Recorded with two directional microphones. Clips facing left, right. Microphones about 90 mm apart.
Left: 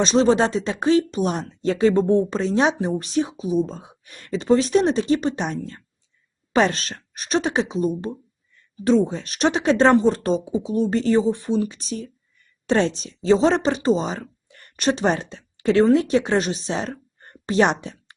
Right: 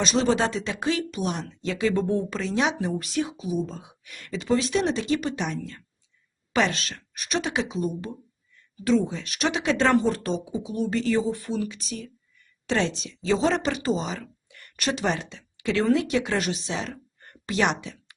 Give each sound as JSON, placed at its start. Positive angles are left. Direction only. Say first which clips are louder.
{"t": 0.0, "sound": "speech", "louder": "left 5 dB", "side_deg": 35}